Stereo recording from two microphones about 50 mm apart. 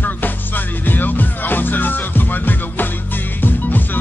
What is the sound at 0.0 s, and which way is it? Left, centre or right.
Music, left.